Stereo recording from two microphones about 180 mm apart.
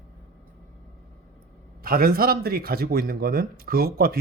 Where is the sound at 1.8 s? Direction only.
55° right (ahead or behind).